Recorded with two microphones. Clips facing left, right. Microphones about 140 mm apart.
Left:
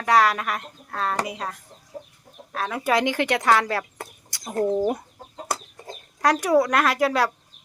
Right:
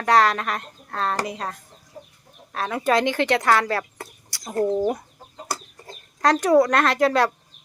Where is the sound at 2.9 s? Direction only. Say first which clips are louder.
Right 2 dB; 15° left (ahead or behind).